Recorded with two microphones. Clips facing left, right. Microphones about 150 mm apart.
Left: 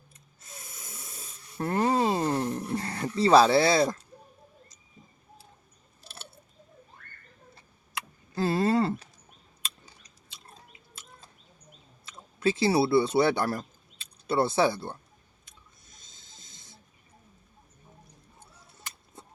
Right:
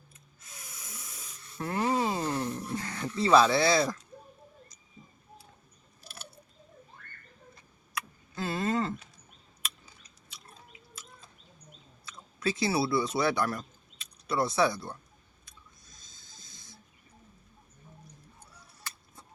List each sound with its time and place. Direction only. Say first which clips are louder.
0.1 s hiss: left 6 dB; 30° left (ahead or behind)
6.0 s a sound: even; 25° left (ahead or behind)
7.9 s vehicle: left 5 dB; 35° left (ahead or behind)
12.0 s speech: left 5 dB; 25° left (ahead or behind)
15.4 s a sound: right 1 dB; 25° left (ahead or behind)
18.3 s honk: left 1 dB; 20° left (ahead or behind)